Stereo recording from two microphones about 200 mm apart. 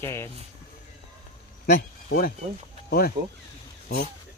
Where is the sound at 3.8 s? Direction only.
50° left (ahead or behind).